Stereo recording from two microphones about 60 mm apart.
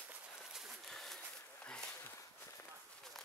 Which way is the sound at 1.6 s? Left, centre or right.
Centre.